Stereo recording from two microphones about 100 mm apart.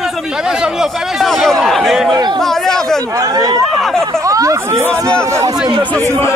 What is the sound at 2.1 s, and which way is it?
Speech, 45° right (ahead or behind).